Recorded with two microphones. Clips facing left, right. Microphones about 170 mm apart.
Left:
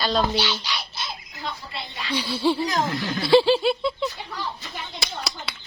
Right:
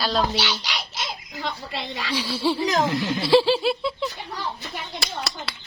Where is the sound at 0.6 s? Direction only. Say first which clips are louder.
Right 1 dB; 90° right.